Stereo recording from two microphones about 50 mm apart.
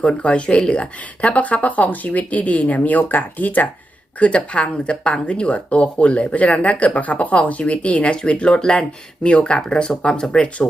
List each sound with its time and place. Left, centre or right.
0.0 s speech: centre; by 3.7 s left
4.2 s speech: left